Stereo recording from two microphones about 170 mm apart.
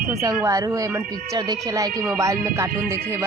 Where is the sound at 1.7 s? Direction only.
20° right (ahead or behind).